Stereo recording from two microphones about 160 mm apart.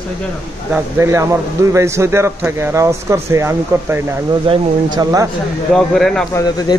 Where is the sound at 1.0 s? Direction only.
20° right (ahead or behind).